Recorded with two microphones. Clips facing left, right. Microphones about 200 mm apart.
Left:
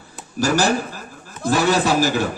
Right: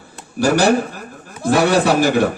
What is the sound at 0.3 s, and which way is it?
Speech, 60° right (ahead or behind).